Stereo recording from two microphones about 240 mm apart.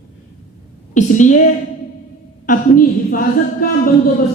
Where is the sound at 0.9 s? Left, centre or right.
Left.